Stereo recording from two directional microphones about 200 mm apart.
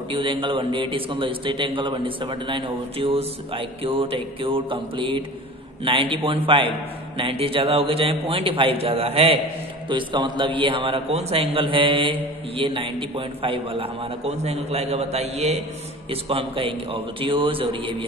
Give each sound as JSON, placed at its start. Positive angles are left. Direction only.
{"t": 0.1, "sound": "a man's voice", "side_deg": -25}